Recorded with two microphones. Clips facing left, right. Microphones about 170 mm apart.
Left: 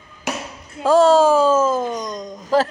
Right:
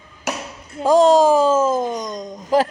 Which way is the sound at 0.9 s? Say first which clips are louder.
Even; 15° right (ahead or behind).